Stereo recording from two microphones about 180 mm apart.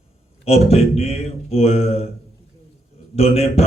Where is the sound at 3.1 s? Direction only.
35° left (ahead or behind).